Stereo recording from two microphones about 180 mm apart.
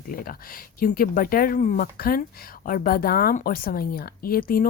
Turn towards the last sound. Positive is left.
turn(degrees=55)  # may be behind; listen again after turning